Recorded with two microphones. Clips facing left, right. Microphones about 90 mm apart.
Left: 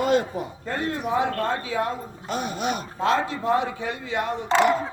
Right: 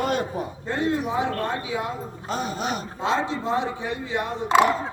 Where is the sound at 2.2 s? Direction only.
35° right (ahead or behind).